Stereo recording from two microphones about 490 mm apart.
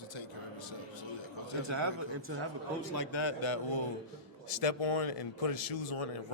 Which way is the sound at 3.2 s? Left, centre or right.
Left.